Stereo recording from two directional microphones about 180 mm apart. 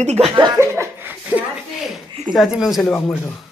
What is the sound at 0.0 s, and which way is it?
Speech, 35° right (ahead or behind).